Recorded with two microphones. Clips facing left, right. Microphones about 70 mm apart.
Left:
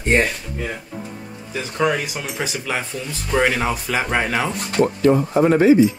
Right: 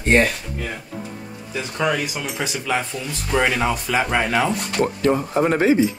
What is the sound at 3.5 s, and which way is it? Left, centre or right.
Speech, centre.